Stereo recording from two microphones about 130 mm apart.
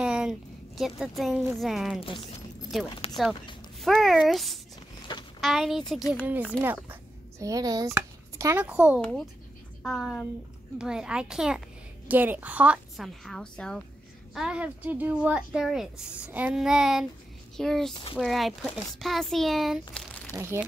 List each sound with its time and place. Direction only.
0.0 s a woman's voice: 5° right (ahead or behind)
2.0 s speech: 40° left (ahead or behind)
3.8 s speech: centre (ahead or behind)
6.2 s speech: 15° right (ahead or behind)
6.6 s a sound: 15° right (ahead or behind)
7.4 s speech: 30° right (ahead or behind)
7.9 s a sound: 25° right (ahead or behind)
8.5 s speech: 10° right (ahead or behind)
9.0 s speech: 5° left (ahead or behind)
14.3 s speech: 5° right (ahead or behind)
16.3 s speech: 15° right (ahead or behind)
16.5 s speech: 5° right (ahead or behind)
19.9 s crumpling: 10° left (ahead or behind)
20.3 s speech: 20° right (ahead or behind)